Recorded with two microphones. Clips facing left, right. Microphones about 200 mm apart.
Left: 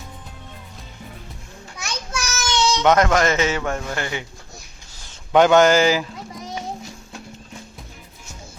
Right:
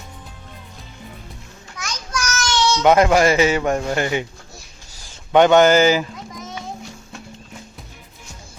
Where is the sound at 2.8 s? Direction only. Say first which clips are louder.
Right 4 dB; 10° right (ahead or behind).